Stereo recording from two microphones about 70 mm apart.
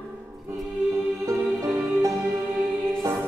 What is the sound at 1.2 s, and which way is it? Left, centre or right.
Music, right.